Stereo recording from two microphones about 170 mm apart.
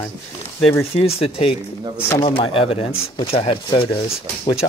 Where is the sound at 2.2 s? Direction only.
30° left (ahead or behind).